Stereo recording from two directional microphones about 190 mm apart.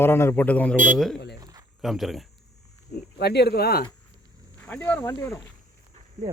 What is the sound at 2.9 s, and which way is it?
Speech, 60° left (ahead or behind).